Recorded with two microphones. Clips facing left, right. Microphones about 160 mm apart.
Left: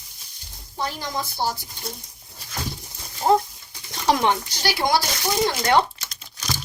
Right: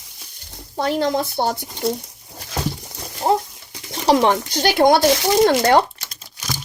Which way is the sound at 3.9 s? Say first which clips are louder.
Right 5 dB; 30° right (ahead or behind).